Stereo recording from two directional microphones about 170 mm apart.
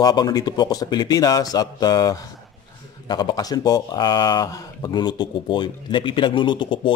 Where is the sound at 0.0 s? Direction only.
25° left (ahead or behind).